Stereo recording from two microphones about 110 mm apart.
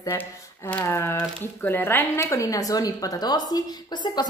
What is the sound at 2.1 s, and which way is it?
A woman's voice, 30° left (ahead or behind).